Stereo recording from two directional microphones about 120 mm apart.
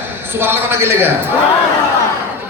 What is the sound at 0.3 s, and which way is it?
Speech, 20° right (ahead or behind).